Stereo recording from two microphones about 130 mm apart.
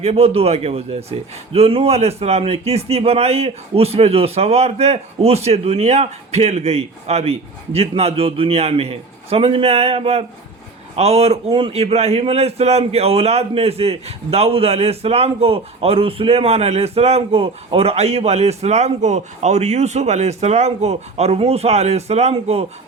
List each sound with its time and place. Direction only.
0.0 s a man's voice: 50° right (ahead or behind)